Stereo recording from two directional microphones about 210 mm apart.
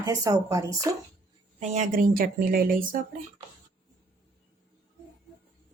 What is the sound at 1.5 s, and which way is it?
A woman's voice, 35° right (ahead or behind).